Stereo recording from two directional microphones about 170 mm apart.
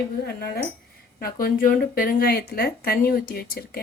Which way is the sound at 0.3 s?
65° left (ahead or behind).